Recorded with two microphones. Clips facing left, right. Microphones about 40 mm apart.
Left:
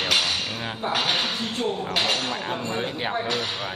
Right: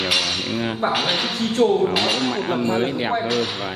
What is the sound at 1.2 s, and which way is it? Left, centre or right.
Speech, right.